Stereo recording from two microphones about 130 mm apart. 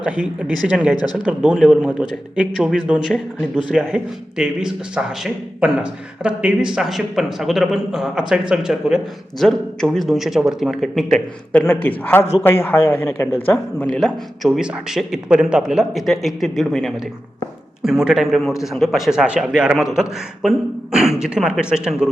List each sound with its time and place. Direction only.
0.0 s speech: 10° right (ahead or behind)
11.6 s speech: 15° left (ahead or behind); by 22.1 s 5° right (ahead or behind)